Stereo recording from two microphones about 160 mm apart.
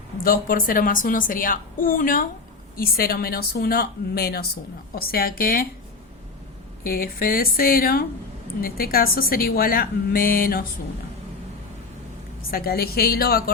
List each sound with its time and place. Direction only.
0.2 s a woman's voice: 65° left (ahead or behind)
2.7 s a woman's voice: 70° left (ahead or behind)
6.8 s a woman's voice: 65° left (ahead or behind)
12.5 s a woman's voice: 70° left (ahead or behind)